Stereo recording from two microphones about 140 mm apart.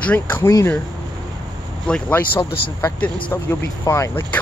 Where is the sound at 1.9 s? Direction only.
10° left (ahead or behind).